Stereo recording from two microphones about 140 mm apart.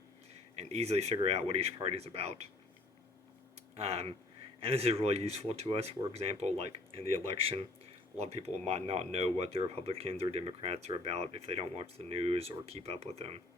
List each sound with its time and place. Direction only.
0.5 s speech: 50° right (ahead or behind)
3.8 s speech: 45° right (ahead or behind)
8.2 s speech: 50° right (ahead or behind)